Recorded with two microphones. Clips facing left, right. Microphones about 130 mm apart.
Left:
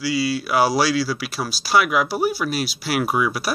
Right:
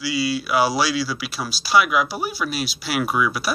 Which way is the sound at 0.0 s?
40° left (ahead or behind).